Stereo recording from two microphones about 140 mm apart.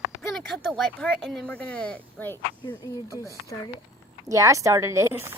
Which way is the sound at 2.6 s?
25° left (ahead or behind).